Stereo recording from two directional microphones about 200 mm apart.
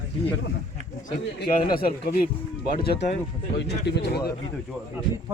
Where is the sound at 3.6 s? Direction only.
55° left (ahead or behind).